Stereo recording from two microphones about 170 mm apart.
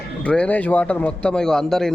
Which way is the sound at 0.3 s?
10° left (ahead or behind).